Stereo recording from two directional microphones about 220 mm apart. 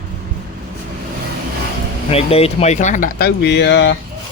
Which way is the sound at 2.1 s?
25° left (ahead or behind).